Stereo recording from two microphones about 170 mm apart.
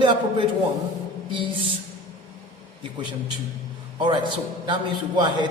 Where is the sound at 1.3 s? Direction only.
30° right (ahead or behind).